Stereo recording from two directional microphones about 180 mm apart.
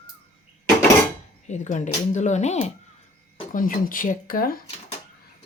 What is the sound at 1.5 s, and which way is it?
Speech, 40° left (ahead or behind).